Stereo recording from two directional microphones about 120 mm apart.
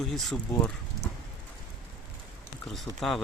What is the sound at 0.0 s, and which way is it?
Speech, centre (ahead or behind).